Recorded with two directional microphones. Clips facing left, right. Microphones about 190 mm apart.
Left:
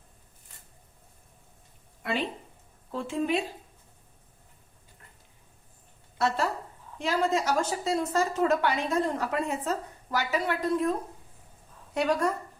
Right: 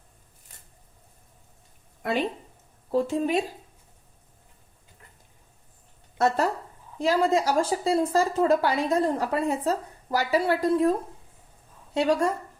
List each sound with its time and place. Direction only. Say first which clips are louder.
2.9 s speech: right 5 dB; 40° right (ahead or behind)
6.1 s speech: right 4 dB; 45° right (ahead or behind)
11.9 s speech: right 3 dB; 30° right (ahead or behind)